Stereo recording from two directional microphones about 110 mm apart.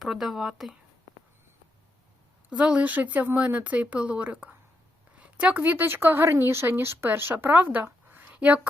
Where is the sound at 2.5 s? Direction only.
10° right (ahead or behind).